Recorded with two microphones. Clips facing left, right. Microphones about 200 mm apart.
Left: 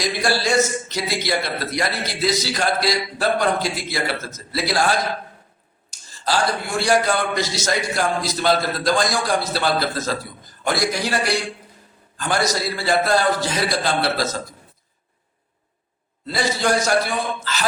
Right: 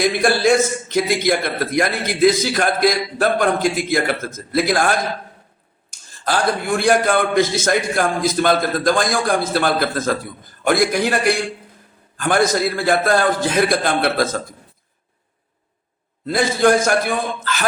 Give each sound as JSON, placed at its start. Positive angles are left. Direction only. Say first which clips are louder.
{"t": 0.0, "sound": "a man's voice", "louder": "right 6 dB", "side_deg": -55}
{"t": 16.2, "sound": "a man's voice", "louder": "right 6 dB", "side_deg": -50}